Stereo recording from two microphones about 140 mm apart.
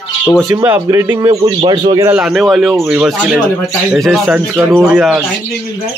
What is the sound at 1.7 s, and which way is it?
Speech, 30° right (ahead or behind).